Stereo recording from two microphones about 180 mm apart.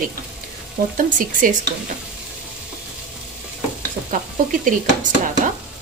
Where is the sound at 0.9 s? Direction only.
45° right (ahead or behind).